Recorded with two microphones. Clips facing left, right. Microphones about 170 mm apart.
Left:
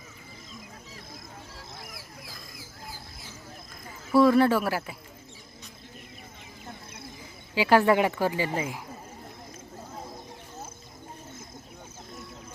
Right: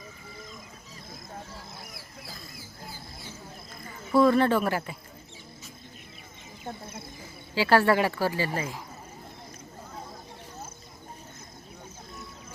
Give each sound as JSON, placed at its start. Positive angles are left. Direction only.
{"t": 4.1, "sound": "speech", "side_deg": 5}
{"t": 7.5, "sound": "speech", "side_deg": 15}